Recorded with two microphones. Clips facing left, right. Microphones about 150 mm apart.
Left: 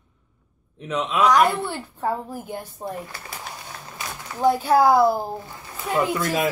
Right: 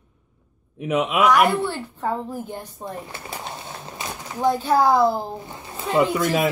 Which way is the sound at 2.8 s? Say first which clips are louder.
Left 1 dB; 20° right (ahead or behind).